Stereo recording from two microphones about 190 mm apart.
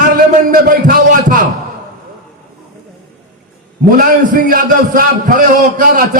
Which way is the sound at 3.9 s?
45° right (ahead or behind).